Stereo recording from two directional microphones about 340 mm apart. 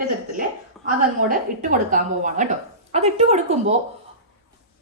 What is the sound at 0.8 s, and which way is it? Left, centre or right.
Speech, right.